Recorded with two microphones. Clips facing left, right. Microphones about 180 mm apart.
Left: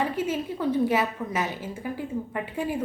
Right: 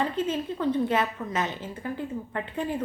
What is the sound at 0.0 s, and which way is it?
A woman's voice, 10° left (ahead or behind).